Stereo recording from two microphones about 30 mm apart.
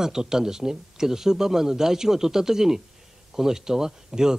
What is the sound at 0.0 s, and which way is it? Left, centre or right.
A man's voice, centre.